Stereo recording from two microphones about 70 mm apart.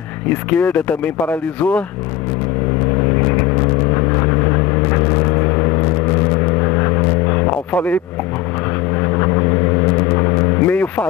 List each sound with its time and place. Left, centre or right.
0.3 s speech: left
3.2 s vehicle: left